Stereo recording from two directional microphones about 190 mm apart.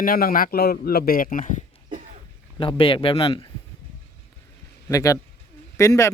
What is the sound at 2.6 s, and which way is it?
Speech, 30° left (ahead or behind).